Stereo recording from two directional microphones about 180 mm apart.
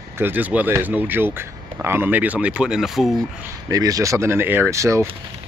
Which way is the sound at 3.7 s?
20° right (ahead or behind).